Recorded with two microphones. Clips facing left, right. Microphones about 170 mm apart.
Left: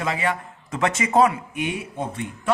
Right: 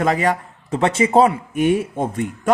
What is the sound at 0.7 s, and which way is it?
Speech, 30° right (ahead or behind).